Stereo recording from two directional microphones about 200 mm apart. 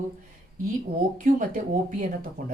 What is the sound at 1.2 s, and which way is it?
Speech, 40° right (ahead or behind).